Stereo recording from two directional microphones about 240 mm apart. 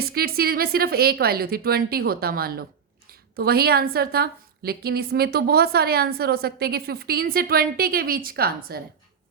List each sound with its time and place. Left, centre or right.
0.0 s a woman's voice: right